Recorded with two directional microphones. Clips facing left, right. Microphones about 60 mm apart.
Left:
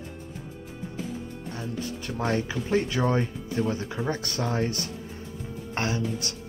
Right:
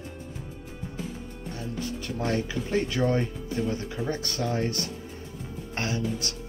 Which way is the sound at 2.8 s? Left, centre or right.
Centre.